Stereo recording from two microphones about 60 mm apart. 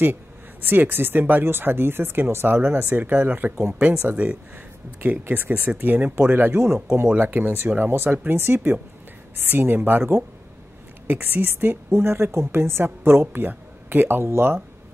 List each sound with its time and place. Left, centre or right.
0.0 s speech: right
5.2 s speech: right